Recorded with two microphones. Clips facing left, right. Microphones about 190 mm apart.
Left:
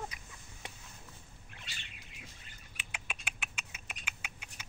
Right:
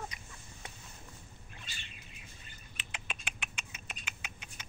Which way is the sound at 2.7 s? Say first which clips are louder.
Right 1 dB; 10° left (ahead or behind).